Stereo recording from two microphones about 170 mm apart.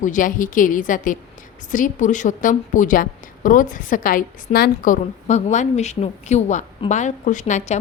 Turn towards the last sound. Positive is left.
turn(degrees=45)  # may be behind; listen again after turning